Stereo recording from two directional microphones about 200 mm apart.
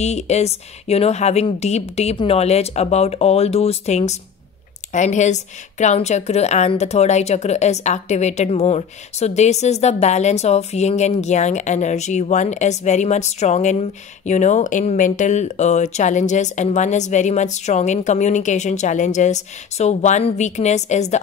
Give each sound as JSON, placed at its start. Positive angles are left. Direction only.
{"t": 0.0, "sound": "a woman's voice", "side_deg": 35}